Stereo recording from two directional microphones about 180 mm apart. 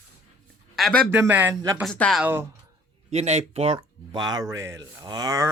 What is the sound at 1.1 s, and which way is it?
Speech, 10° right (ahead or behind).